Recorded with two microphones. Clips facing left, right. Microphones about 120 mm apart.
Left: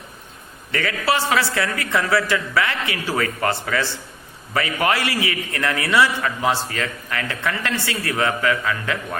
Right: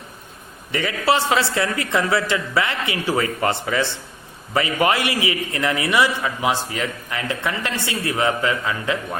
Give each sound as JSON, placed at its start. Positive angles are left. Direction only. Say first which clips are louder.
{"t": 0.7, "sound": "a man's voice", "louder": "right 2 dB", "side_deg": -20}